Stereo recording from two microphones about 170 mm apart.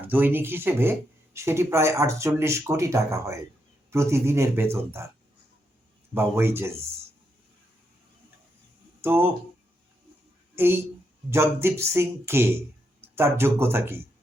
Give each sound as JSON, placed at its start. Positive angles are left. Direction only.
{"t": 0.0, "sound": "speech", "side_deg": -10}
{"t": 6.1, "sound": "speech", "side_deg": -15}
{"t": 9.0, "sound": "speech", "side_deg": -10}
{"t": 10.5, "sound": "a woman's voice", "side_deg": -15}